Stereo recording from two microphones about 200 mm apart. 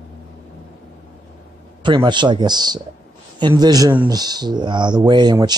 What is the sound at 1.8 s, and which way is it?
Speech, 20° right (ahead or behind).